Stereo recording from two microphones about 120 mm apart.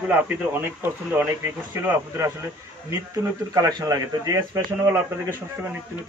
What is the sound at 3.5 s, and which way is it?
A man's voice, 30° right (ahead or behind).